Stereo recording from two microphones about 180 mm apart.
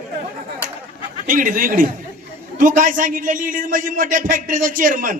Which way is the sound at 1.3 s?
50° right (ahead or behind).